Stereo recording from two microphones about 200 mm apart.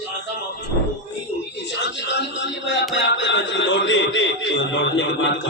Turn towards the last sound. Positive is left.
turn(degrees=65)  # may be behind; listen again after turning